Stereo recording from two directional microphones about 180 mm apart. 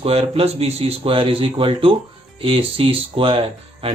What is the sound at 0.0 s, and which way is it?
Speech, 35° right (ahead or behind).